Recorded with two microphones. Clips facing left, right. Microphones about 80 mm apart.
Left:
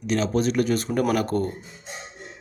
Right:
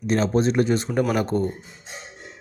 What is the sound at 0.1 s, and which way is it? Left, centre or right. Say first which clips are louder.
Speech: right 2 dB; right.